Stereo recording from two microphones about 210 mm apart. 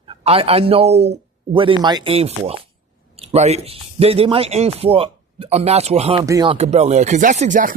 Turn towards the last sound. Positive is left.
turn(degrees=-35)  # may be behind; listen again after turning